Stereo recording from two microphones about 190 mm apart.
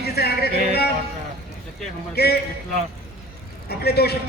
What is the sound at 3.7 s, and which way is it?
Speech, 55° left (ahead or behind).